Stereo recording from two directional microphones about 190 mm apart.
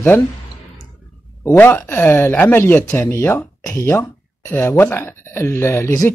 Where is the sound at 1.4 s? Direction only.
10° left (ahead or behind).